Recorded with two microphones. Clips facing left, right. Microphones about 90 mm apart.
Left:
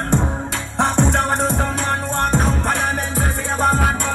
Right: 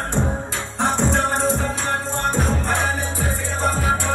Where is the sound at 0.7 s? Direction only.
70° left (ahead or behind).